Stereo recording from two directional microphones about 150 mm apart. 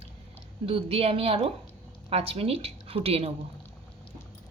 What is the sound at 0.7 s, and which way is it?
A woman's voice, 40° right (ahead or behind).